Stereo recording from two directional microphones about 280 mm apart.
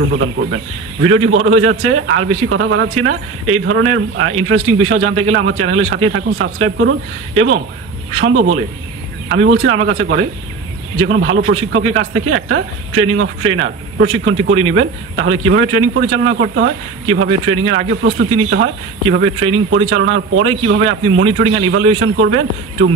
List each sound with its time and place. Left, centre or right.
1.0 s speech: right